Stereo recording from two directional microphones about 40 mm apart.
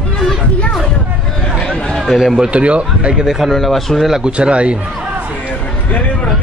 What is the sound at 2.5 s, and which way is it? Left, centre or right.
Speech, right.